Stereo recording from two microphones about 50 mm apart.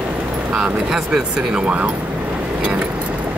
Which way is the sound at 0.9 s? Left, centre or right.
Centre.